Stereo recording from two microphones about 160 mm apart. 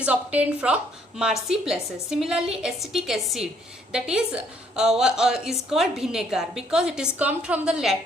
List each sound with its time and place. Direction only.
0.0 s a woman's voice: 10° right (ahead or behind)